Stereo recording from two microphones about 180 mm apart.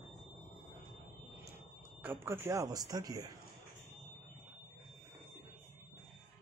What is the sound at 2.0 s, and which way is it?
Speech, 10° right (ahead or behind).